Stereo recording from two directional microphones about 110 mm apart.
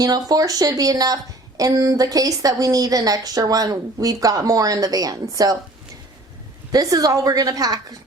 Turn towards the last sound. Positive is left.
turn(degrees=-35)  # may be behind; listen again after turning